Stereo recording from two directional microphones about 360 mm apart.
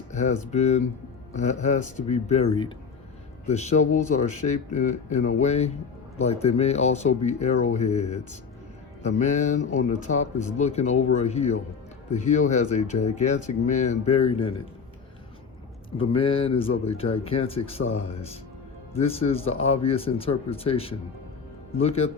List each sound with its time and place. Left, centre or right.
0.1 s speech: centre
16.0 s speech: centre
18.9 s speech: centre